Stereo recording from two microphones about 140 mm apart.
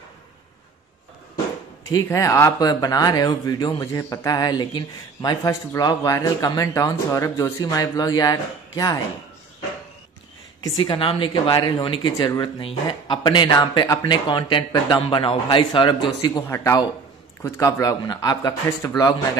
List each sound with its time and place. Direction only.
1.9 s speech: 25° left (ahead or behind)
10.8 s speech: 40° left (ahead or behind)
16.4 s speech: 20° left (ahead or behind)